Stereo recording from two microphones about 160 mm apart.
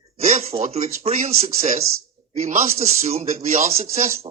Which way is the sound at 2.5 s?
45° right (ahead or behind).